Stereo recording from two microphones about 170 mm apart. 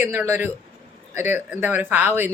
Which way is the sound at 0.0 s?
15° right (ahead or behind).